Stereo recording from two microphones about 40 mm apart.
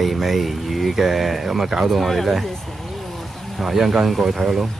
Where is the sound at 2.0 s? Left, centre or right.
Centre.